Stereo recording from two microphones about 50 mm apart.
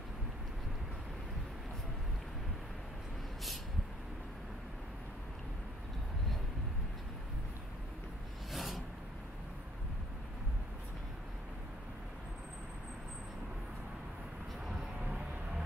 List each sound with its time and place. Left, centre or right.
8.5 s filing: centre
15.0 s vehicle: right